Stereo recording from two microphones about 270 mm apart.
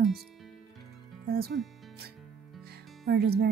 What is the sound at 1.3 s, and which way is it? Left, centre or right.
Speech, right.